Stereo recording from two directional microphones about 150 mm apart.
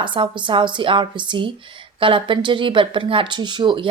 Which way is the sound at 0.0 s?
35° right (ahead or behind).